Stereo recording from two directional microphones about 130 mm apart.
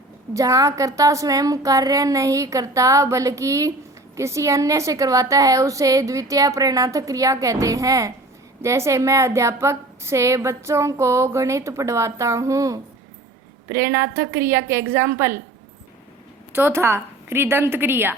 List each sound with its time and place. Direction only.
0.3 s a woman's voice: 25° right (ahead or behind)
16.5 s a woman's voice: 15° right (ahead or behind)